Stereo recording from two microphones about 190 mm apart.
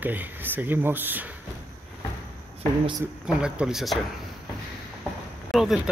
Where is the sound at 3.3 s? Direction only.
5° right (ahead or behind).